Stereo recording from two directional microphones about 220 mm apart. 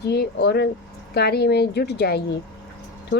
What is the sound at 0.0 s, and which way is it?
A woman's voice, 45° left (ahead or behind).